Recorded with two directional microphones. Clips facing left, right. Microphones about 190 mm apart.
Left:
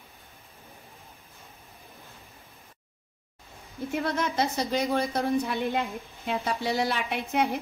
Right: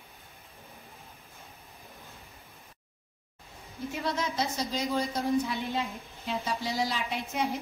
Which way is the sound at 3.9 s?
55° left (ahead or behind).